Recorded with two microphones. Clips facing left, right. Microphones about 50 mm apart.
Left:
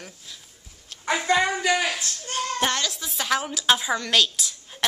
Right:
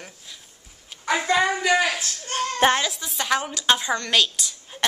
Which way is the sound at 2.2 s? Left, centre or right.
Right.